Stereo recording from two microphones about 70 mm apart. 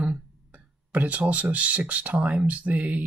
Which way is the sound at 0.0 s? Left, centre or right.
Right.